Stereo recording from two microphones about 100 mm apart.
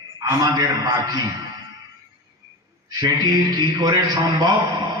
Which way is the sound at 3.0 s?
50° right (ahead or behind).